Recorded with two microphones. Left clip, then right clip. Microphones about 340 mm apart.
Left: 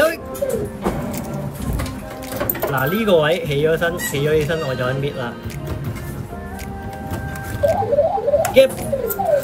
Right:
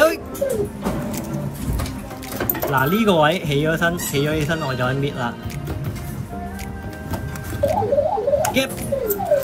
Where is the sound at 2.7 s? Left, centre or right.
Centre.